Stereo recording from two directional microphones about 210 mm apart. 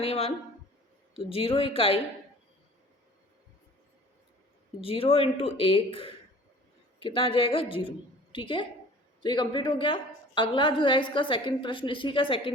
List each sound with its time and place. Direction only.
0.0 s a woman's voice: 30° left (ahead or behind)
4.8 s a woman's voice: 25° left (ahead or behind)